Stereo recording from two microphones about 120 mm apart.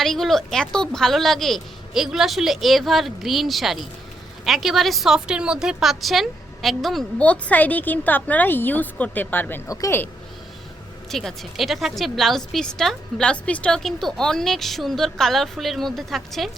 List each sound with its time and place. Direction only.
0.0 s a woman's voice: centre (ahead or behind)
7.3 s a woman's voice: 10° left (ahead or behind)
9.6 s speech: 30° left (ahead or behind)
11.1 s a woman's voice: 5° left (ahead or behind)